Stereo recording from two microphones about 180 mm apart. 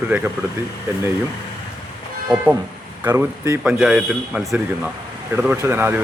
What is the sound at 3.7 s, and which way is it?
A man's voice, 5° right (ahead or behind).